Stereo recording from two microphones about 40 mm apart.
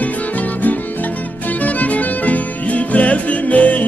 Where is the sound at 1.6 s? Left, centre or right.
Left.